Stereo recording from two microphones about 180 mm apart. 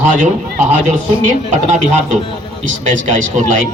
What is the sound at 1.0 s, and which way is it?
Speech, 40° right (ahead or behind).